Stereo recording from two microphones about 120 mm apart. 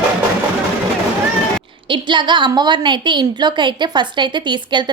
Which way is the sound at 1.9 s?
40° right (ahead or behind).